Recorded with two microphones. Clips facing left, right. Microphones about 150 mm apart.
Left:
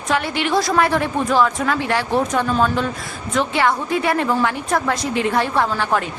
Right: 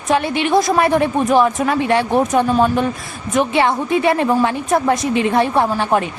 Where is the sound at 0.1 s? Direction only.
20° right (ahead or behind).